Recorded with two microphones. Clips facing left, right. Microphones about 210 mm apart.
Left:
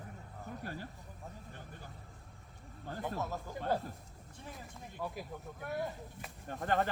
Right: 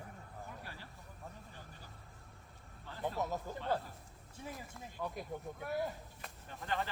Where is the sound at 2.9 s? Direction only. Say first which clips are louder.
Left 8 dB; 45° left (ahead or behind).